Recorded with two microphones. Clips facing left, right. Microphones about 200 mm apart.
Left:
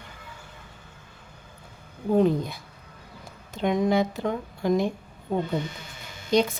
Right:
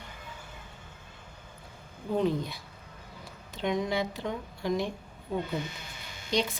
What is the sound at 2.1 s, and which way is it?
Speech, 50° left (ahead or behind).